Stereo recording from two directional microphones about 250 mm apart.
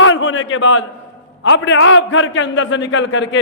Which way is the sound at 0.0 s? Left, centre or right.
Left.